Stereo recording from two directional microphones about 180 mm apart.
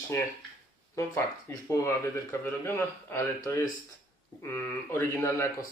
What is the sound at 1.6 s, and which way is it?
Speech, 15° left (ahead or behind).